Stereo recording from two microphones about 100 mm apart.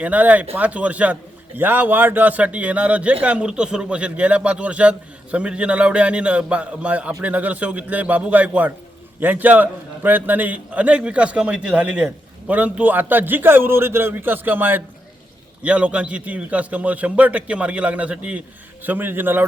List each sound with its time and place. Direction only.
0.0 s a man's voice: 15° right (ahead or behind)